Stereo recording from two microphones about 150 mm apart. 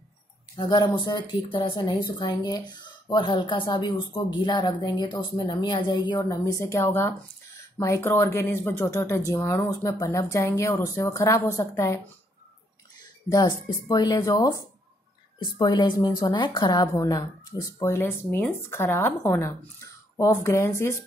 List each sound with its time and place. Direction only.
0.6 s speech: 30° left (ahead or behind)
13.0 s speech: 25° left (ahead or behind)